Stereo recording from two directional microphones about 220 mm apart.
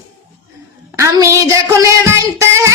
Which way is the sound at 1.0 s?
15° right (ahead or behind).